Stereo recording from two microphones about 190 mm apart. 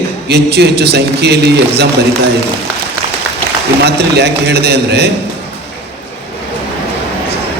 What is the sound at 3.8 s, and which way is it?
A man's voice, 60° right (ahead or behind).